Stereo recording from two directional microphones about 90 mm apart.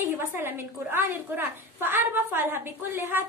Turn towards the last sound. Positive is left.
turn(degrees=-25)  # may be behind; listen again after turning